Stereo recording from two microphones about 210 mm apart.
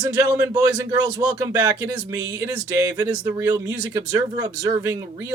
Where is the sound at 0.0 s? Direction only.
20° right (ahead or behind).